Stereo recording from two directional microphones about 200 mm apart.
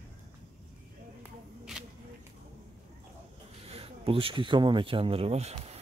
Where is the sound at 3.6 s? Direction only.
30° right (ahead or behind).